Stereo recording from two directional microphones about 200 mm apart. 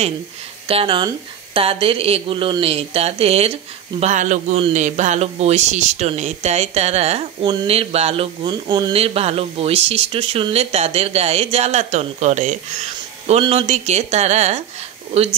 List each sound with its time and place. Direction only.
0.7 s speech: 25° right (ahead or behind)